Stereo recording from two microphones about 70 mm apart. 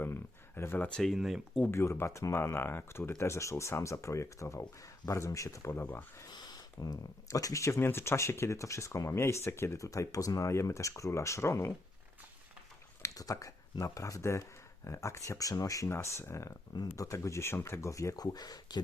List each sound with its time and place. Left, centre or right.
0.0 s a sound: left
0.9 s speech: centre
1.1 s speech: centre
1.7 s speech: left
3.1 s speech: left
5.7 s speech: left
6.3 s speech: left
13.1 s speech: left
15.9 s speech: left
16.7 s speech: left
18.2 s speech: left